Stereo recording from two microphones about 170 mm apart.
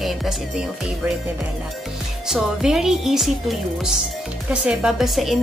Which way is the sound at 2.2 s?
5° right (ahead or behind).